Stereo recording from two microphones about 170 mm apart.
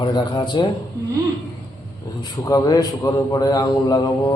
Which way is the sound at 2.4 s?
20° left (ahead or behind).